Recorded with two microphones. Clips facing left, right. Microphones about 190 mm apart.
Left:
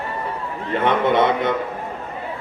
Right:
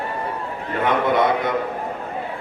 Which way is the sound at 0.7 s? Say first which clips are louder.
Left 2 dB; 25° left (ahead or behind).